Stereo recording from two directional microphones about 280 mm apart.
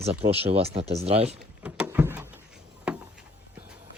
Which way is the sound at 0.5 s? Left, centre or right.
Right.